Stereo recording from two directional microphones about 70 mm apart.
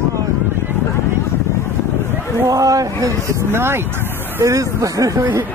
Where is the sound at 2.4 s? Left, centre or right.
Right.